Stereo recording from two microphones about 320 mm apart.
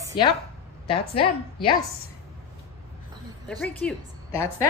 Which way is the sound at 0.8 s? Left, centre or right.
Centre.